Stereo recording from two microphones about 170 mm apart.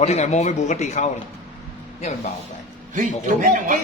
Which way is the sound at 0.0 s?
40° left (ahead or behind).